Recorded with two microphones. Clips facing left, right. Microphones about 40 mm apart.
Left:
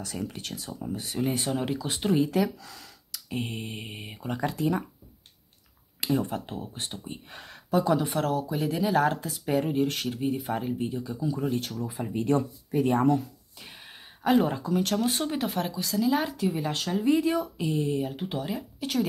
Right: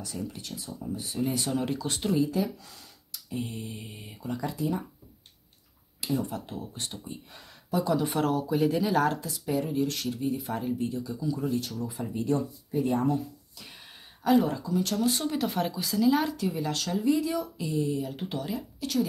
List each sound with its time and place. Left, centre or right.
0.0 s speech: left
1.5 s speech: centre
2.0 s speech: left
3.1 s speech: left
6.0 s speech: left
7.1 s speech: left
8.0 s speech: centre
9.2 s speech: left
11.7 s speech: left
12.1 s speech: left
14.4 s speech: left
15.4 s speech: centre; by 17.0 s left
17.0 s speech: left
18.3 s speech: left